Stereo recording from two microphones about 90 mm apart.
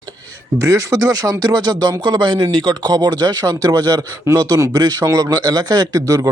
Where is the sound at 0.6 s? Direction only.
40° right (ahead or behind).